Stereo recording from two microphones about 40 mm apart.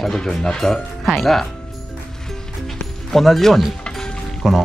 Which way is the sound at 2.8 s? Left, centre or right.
Centre.